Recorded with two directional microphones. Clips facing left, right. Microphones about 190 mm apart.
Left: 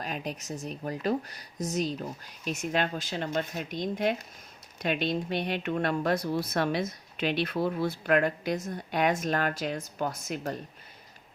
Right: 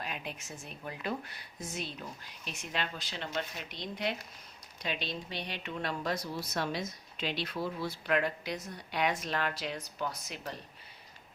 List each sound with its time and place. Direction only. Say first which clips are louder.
0.0 s speech: left 6 dB; 40° left (ahead or behind)